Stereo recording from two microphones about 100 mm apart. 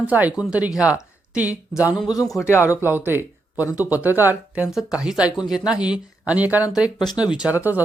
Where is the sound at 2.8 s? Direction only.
20° right (ahead or behind).